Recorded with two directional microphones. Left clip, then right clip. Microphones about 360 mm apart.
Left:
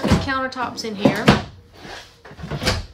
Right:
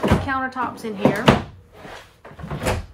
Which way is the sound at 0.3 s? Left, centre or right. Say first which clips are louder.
Even; centre.